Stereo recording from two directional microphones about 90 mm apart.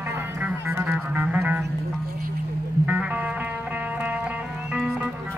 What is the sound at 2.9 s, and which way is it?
Music, 15° right (ahead or behind).